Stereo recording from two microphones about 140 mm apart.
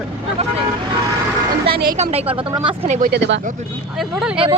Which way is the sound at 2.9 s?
70° right (ahead or behind).